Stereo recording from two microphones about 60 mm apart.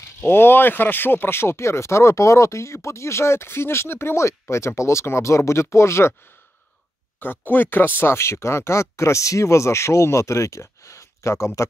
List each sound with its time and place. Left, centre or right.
0.2 s speech: left
7.2 s speech: left